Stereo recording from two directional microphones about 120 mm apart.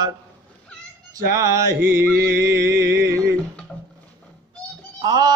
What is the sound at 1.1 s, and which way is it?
Mantra, 25° right (ahead or behind).